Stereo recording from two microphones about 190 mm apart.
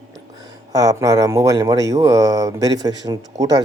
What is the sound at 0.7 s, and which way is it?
Speech, 20° right (ahead or behind).